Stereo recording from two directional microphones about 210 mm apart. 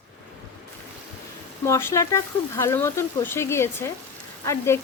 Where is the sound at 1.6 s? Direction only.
10° left (ahead or behind).